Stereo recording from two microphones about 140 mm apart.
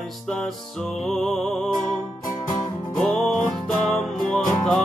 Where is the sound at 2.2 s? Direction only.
25° left (ahead or behind).